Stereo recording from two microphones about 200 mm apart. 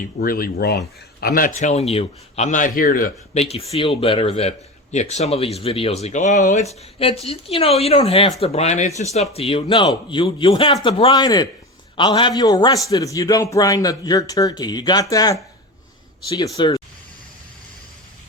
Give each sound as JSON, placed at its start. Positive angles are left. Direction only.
{"t": 0.0, "sound": "speech", "side_deg": 45}
{"t": 3.5, "sound": "a man's voice", "side_deg": 30}
{"t": 16.6, "sound": "speech", "side_deg": 25}